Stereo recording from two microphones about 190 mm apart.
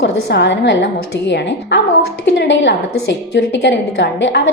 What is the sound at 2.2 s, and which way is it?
A woman's voice, 70° left (ahead or behind).